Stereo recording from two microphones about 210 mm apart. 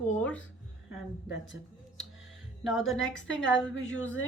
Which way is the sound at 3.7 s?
65° left (ahead or behind).